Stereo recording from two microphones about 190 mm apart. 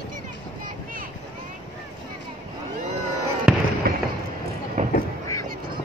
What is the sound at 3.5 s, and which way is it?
Fireworks, 5° right (ahead or behind).